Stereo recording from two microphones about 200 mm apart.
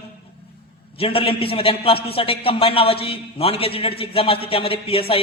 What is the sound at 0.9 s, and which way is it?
A man's voice, 30° left (ahead or behind).